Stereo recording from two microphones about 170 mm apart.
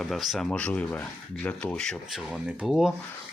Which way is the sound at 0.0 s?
Centre (ahead or behind).